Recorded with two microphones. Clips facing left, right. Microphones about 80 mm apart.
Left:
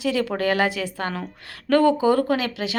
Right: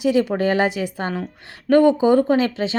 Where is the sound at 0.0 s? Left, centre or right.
Right.